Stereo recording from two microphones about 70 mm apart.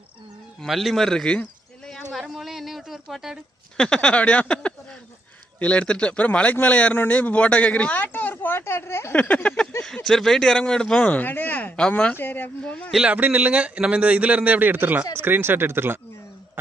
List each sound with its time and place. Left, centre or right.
0.7 s a man's voice: centre
2.1 s a sound: centre
3.7 s a man's voice: centre; by 9.1 s left
9.1 s a man's voice: left
13.0 s a man's voice: right